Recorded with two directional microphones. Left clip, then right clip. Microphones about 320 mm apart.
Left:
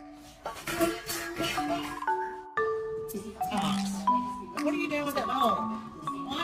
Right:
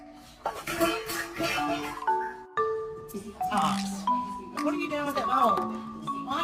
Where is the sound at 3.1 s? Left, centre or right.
Centre.